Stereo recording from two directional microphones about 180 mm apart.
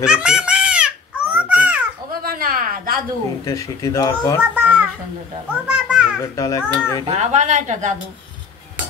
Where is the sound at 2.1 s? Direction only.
55° right (ahead or behind).